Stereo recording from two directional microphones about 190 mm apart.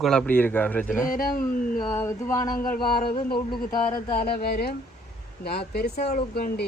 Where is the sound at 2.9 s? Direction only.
25° left (ahead or behind).